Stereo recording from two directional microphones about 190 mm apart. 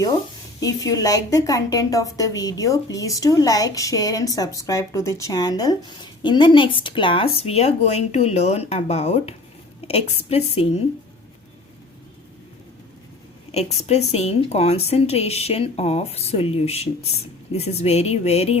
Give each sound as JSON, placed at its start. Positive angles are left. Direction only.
{"t": 0.6, "sound": "a woman's voice", "side_deg": 20}
{"t": 13.5, "sound": "speech", "side_deg": 35}